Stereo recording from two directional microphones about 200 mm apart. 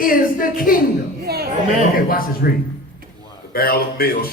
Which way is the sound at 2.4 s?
50° left (ahead or behind).